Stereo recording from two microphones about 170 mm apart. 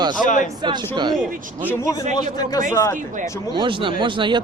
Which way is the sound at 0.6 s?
25° right (ahead or behind).